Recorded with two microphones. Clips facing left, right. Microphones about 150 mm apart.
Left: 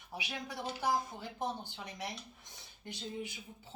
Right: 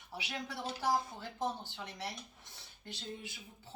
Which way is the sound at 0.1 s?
15° left (ahead or behind).